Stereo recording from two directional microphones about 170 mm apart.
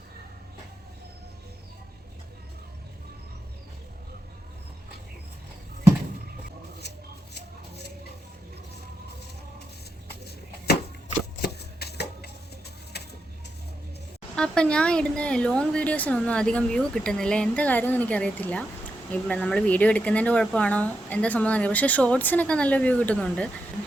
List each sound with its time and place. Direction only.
11.3 s chopping: 70° left (ahead or behind)
12.9 s bird: 70° left (ahead or behind)
14.3 s speech: 5° left (ahead or behind)